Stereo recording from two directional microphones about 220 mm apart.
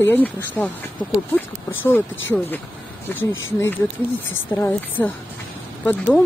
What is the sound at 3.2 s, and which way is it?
Speech, 65° left (ahead or behind).